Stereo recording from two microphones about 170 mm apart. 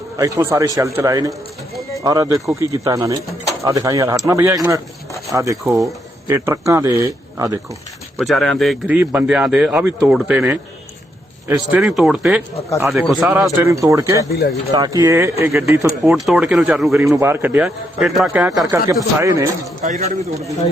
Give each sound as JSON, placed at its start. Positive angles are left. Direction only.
{"t": 0.2, "sound": "a man's voice", "side_deg": -20}
{"t": 8.2, "sound": "a man's voice", "side_deg": 0}
{"t": 14.3, "sound": "speech", "side_deg": 65}
{"t": 14.7, "sound": "a man's voice", "side_deg": -20}
{"t": 16.1, "sound": "speech", "side_deg": 0}
{"t": 17.2, "sound": "a man's voice", "side_deg": -15}
{"t": 19.2, "sound": "a man's voice", "side_deg": -20}
{"t": 19.8, "sound": "speech", "side_deg": -45}